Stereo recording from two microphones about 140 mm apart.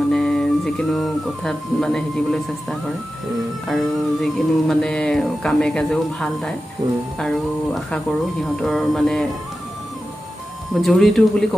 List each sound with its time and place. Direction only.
0.1 s speech: centre (ahead or behind)
6.8 s speech: 30° right (ahead or behind)
7.2 s speech: 5° left (ahead or behind)
10.8 s speech: centre (ahead or behind)